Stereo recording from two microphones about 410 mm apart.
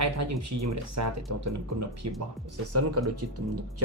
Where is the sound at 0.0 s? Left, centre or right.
Right.